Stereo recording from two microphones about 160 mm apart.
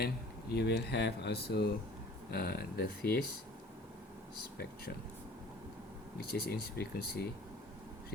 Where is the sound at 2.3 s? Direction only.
75° left (ahead or behind).